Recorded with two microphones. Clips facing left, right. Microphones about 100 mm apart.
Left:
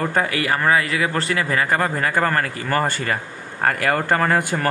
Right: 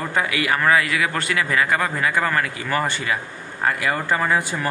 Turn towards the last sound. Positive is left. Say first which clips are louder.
# left 2 dB
turn(degrees=55)  # may be behind; listen again after turning